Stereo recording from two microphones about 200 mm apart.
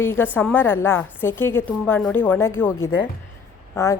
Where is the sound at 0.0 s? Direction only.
10° left (ahead or behind).